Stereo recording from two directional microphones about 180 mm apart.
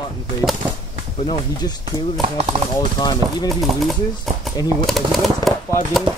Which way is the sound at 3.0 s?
20° left (ahead or behind).